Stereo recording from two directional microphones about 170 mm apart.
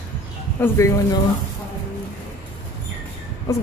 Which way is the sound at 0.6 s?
15° left (ahead or behind).